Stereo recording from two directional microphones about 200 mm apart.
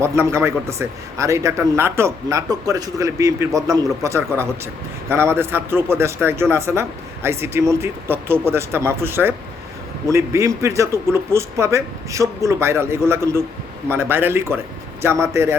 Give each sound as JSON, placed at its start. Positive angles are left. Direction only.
{"t": 0.0, "sound": "a man's voice", "side_deg": -15}